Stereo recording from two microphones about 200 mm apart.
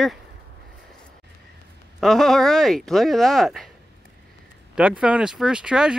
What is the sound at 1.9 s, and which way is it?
Speech, centre (ahead or behind).